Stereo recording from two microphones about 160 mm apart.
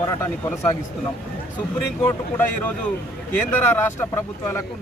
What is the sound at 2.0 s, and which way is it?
Speech, 15° left (ahead or behind).